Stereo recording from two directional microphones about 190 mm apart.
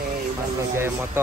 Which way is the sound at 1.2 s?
10° right (ahead or behind).